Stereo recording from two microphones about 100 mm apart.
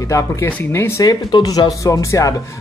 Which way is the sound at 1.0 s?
40° left (ahead or behind).